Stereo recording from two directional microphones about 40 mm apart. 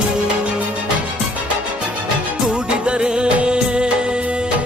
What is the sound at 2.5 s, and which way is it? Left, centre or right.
Music, right.